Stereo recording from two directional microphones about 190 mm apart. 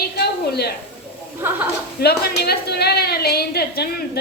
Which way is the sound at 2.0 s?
55° left (ahead or behind).